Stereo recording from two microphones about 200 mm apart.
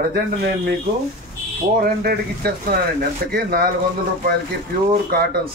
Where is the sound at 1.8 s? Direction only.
50° right (ahead or behind).